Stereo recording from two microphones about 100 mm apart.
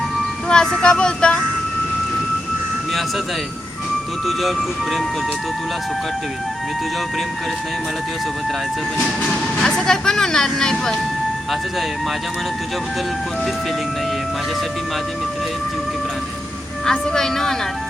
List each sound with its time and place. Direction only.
0.4 s vehicle: 5° left (ahead or behind)
4.3 s speech: centre (ahead or behind)
9.0 s speech: centre (ahead or behind)
16.8 s speech: 5° left (ahead or behind)